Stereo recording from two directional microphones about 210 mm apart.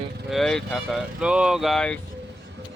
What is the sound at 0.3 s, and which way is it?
Speech, centre (ahead or behind).